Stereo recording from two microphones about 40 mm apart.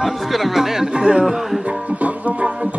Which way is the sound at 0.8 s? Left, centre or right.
Right.